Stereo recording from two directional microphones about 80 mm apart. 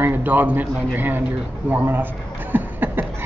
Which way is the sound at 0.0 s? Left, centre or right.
Right.